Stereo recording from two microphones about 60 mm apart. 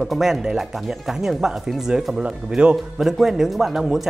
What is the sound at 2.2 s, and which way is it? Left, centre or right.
Speech, centre.